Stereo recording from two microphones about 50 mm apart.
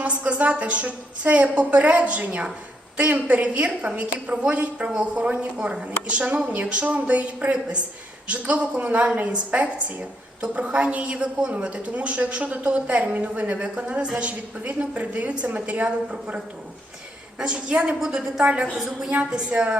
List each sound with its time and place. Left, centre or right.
0.0 s a woman's voice: right
18.9 s a woman's voice: centre
19.5 s a woman's voice: right